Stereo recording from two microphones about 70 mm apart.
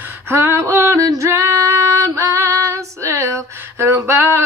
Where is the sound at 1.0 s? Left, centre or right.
Right.